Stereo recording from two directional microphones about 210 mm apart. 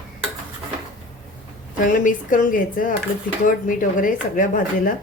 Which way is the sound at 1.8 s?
40° left (ahead or behind).